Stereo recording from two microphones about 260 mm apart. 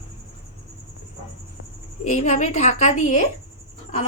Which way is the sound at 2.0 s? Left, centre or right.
Left.